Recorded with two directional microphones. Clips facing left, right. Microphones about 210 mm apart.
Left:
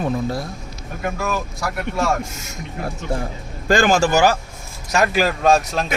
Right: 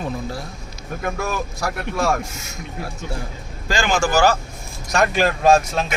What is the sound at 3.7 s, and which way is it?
Speech, 50° left (ahead or behind).